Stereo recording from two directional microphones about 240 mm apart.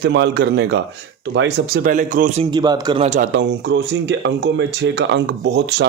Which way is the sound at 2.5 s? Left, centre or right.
Centre.